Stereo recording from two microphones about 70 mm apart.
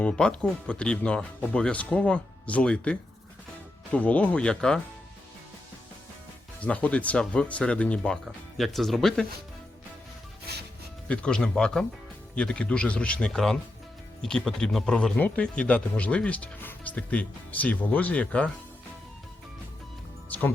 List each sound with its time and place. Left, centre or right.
0.0 s speech: centre
6.6 s speech: centre
8.2 s speech: centre
11.1 s speech: centre
14.9 s speech: centre